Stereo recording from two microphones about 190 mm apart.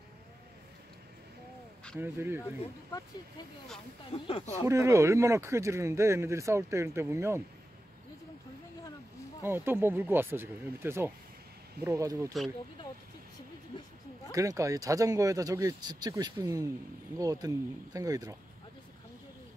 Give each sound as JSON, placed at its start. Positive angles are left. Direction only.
{"t": 2.0, "sound": "speech", "side_deg": -10}
{"t": 4.1, "sound": "speech", "side_deg": 30}
{"t": 4.6, "sound": "speech", "side_deg": -15}
{"t": 9.4, "sound": "speech", "side_deg": -10}
{"t": 14.3, "sound": "speech", "side_deg": -15}